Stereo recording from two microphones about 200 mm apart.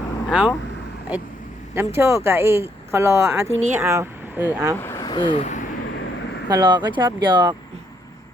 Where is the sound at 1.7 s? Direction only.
10° right (ahead or behind).